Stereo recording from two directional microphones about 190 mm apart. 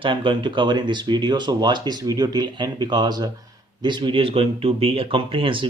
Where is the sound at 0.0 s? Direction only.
25° right (ahead or behind).